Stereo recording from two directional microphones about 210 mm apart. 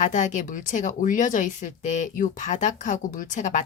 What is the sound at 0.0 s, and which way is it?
Speech, 35° left (ahead or behind).